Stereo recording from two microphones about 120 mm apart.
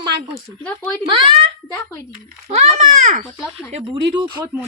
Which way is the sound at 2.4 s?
80° right.